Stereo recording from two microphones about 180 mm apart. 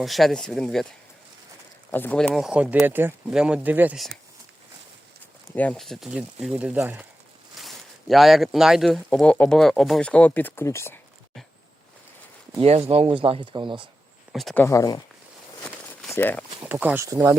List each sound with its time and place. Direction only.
0.0 s speech: centre (ahead or behind)
1.9 s speech: 10° left (ahead or behind)
5.5 s speech: 10° left (ahead or behind)
12.5 s speech: 35° right (ahead or behind)
14.3 s speech: centre (ahead or behind)
14.6 s speech: 20° left (ahead or behind)
15.6 s a sound: centre (ahead or behind)
16.1 s speech: 10° left (ahead or behind)
16.6 s speech: 10° right (ahead or behind)